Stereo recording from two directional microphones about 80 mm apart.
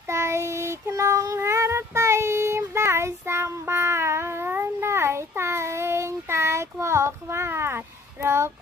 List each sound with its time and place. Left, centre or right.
0.1 s child singing: right